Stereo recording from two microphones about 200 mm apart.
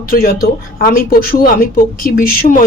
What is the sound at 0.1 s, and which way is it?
Speech, 45° left (ahead or behind).